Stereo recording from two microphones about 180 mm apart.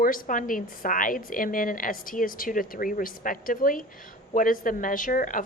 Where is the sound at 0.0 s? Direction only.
50° left (ahead or behind).